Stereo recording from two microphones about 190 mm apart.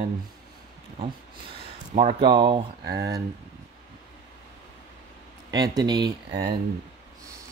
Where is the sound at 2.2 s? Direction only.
25° right (ahead or behind).